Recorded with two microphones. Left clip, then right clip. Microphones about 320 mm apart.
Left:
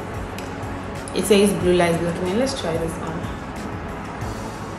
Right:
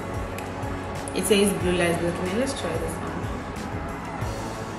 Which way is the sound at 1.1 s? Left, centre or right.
Centre.